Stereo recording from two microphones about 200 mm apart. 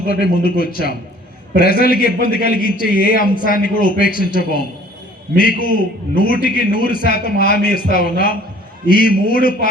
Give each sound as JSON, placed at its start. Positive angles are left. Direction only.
{"t": 0.1, "sound": "a man's voice", "side_deg": 50}